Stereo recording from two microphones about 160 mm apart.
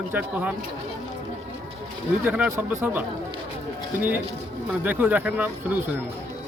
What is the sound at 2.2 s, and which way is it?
Speech, 10° right (ahead or behind).